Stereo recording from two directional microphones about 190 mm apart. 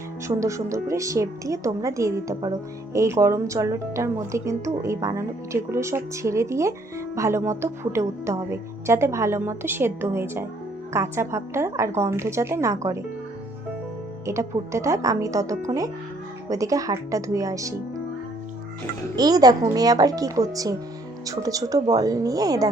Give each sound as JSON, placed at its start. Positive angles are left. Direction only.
{"t": 0.3, "sound": "a woman's voice", "side_deg": -15}
{"t": 14.3, "sound": "a woman's voice", "side_deg": -15}
{"t": 19.1, "sound": "speech", "side_deg": -20}